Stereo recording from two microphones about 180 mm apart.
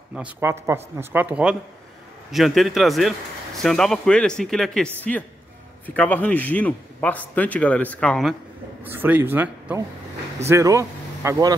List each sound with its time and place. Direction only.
0.1 s a man's voice: 10° right (ahead or behind)
8.8 s speech: 10° right (ahead or behind)